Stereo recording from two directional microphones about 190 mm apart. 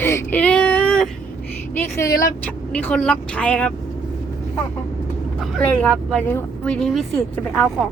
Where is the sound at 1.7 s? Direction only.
15° left (ahead or behind).